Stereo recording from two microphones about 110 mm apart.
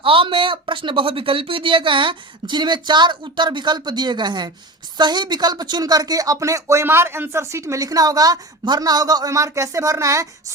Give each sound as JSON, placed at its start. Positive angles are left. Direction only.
{"t": 0.0, "sound": "speech", "side_deg": -50}